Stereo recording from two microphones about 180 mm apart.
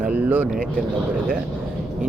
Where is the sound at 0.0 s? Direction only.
10° right (ahead or behind).